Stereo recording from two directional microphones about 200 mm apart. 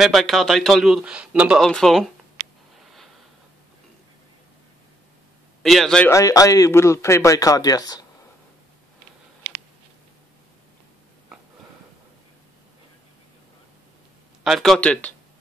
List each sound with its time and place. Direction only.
0.0 s a man's voice: centre (ahead or behind)
5.6 s a man's voice: centre (ahead or behind); by 8.1 s 20° left (ahead or behind)
14.4 s a man's voice: centre (ahead or behind)